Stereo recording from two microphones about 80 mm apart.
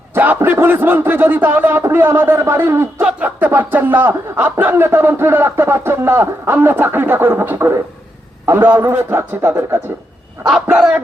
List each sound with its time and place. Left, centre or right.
0.1 s speech: right
3.0 s speech: centre
9.0 s speech: right